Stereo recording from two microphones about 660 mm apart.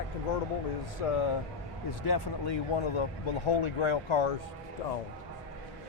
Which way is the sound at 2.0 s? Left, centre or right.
Left.